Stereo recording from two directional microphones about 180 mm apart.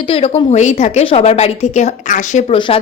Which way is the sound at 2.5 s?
25° left (ahead or behind).